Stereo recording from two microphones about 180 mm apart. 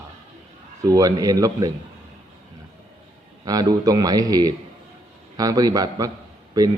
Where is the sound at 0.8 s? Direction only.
20° right (ahead or behind).